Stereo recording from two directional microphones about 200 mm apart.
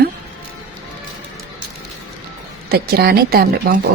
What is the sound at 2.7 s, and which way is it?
A woman's voice, 50° right (ahead or behind).